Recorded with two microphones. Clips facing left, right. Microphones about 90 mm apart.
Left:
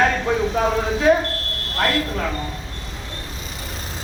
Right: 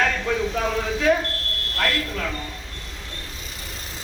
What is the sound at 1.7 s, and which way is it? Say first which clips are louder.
Fire alarm: left 4 dB; 25° left (ahead or behind).